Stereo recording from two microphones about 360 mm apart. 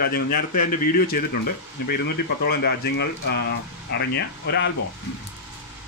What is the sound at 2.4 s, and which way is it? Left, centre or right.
A man's voice, left.